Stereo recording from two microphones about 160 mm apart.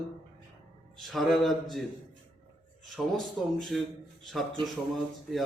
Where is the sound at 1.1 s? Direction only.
Centre (ahead or behind).